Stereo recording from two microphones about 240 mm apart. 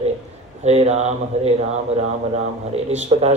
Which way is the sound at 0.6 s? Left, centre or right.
Right.